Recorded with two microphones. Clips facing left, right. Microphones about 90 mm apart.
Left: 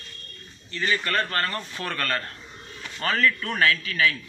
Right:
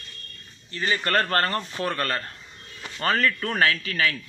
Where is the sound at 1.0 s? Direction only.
45° right (ahead or behind).